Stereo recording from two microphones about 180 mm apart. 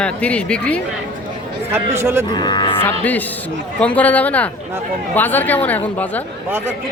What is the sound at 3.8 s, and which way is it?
Speech, 5° left (ahead or behind).